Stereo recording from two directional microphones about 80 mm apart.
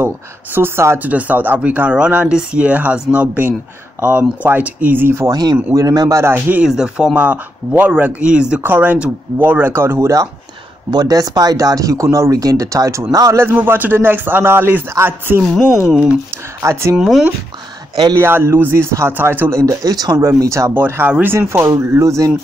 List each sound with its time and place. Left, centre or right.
0.6 s a man's voice: right
5.3 s speech: right
5.8 s speech: right
6.6 s speech: centre
7.2 s a man's voice: right
10.9 s speech: right
13.4 s a man's voice: right
15.4 s speech: centre
15.7 s speech: centre
18.1 s speech: right
19.6 s speech: right
20.2 s speech: right
20.7 s a man's voice: right
21.4 s speech: right